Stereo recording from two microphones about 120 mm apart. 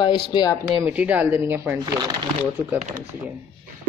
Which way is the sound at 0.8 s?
15° right (ahead or behind).